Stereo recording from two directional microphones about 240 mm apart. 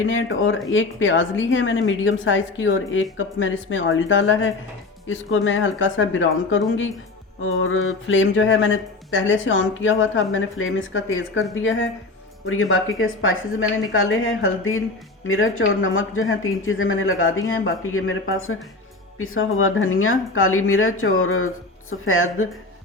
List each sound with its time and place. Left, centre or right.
0.1 s speech: left